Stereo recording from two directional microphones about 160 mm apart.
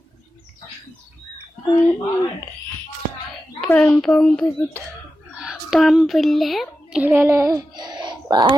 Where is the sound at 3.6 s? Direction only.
15° left (ahead or behind).